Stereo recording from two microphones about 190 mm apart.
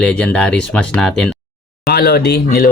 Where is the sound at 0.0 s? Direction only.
5° left (ahead or behind).